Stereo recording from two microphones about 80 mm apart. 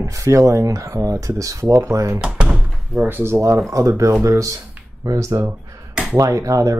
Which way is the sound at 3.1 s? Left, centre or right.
Right.